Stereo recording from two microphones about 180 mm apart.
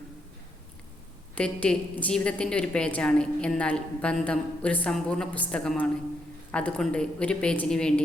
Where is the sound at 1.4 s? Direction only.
5° left (ahead or behind).